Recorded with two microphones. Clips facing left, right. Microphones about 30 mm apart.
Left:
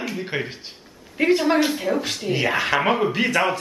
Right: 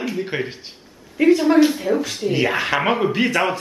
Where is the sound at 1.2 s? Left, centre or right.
Left.